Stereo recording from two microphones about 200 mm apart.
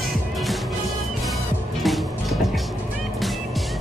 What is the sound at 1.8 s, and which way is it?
Music, centre (ahead or behind).